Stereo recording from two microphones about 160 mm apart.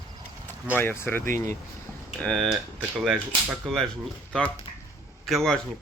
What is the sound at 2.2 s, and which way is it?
Speech, 5° left (ahead or behind).